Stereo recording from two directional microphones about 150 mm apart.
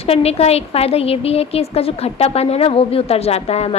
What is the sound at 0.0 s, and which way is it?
A woman's voice, 40° left (ahead or behind).